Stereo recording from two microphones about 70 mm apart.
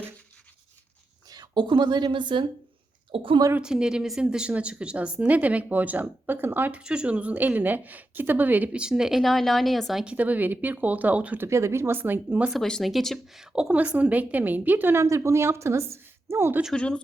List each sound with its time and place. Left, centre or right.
1.3 s a woman's voice: right
3.6 s a woman's voice: centre; by 6.7 s right
6.7 s a woman's voice: centre
8.8 s speech: centre
10.0 s a woman's voice: centre
11.3 s a woman's voice: right
12.8 s speech: centre
13.4 s a woman's voice: centre; by 15.0 s right
15.0 s a woman's voice: right
16.7 s speech: centre